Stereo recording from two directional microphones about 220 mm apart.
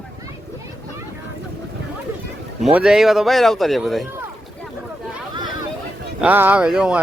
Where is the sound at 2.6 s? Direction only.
Centre (ahead or behind).